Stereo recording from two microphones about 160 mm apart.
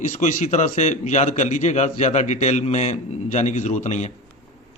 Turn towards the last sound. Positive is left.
turn(degrees=45)  # may be behind; listen again after turning